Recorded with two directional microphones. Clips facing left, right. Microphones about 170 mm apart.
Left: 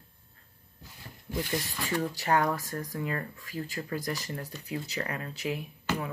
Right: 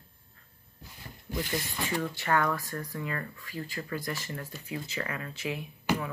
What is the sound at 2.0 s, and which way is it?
Speech, 40° left (ahead or behind).